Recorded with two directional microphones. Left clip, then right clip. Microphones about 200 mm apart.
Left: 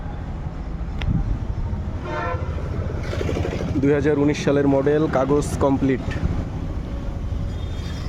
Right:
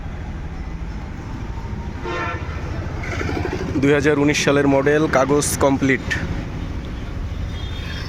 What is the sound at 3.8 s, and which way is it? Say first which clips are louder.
Speech: right 3 dB; centre (ahead or behind).